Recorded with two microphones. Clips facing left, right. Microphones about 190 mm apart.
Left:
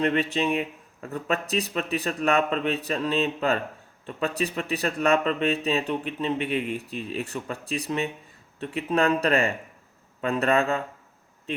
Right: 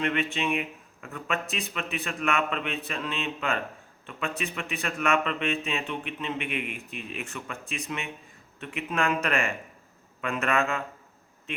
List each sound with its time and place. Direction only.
0.0 s speech: 35° left (ahead or behind)